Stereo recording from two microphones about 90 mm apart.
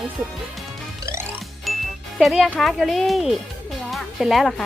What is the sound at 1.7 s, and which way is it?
Music, centre (ahead or behind).